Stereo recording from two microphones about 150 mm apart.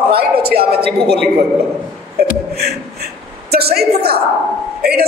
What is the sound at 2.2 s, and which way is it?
A woman's voice, 90° right.